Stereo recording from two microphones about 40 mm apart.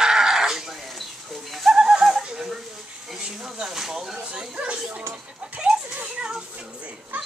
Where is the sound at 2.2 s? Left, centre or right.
Centre.